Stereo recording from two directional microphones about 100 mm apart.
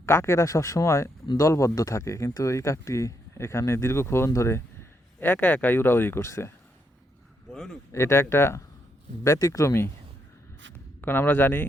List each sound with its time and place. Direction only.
0.0 s speech: 25° left (ahead or behind)
7.5 s speech: 5° left (ahead or behind)
7.9 s speech: 25° left (ahead or behind)
11.0 s speech: 20° left (ahead or behind)